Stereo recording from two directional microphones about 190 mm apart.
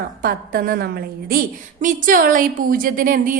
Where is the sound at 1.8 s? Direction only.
45° right (ahead or behind).